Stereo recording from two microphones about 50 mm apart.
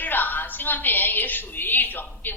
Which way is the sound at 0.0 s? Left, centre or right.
Left.